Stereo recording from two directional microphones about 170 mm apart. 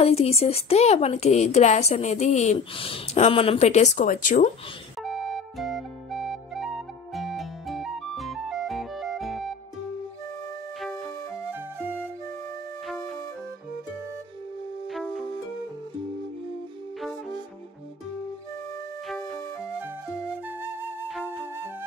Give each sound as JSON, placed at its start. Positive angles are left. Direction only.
{"t": 0.0, "sound": "a woman's voice", "side_deg": 35}
{"t": 5.0, "sound": "flute", "side_deg": 0}
{"t": 10.8, "sound": "music", "side_deg": 0}
{"t": 14.9, "sound": "music", "side_deg": 0}
{"t": 19.0, "sound": "music", "side_deg": 5}
{"t": 21.1, "sound": "flute", "side_deg": -10}